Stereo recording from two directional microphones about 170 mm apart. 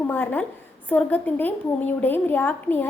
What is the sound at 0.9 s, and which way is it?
A woman's voice, 10° left (ahead or behind).